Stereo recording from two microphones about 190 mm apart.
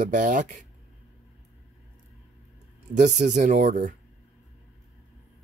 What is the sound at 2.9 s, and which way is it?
Speech, 40° right (ahead or behind).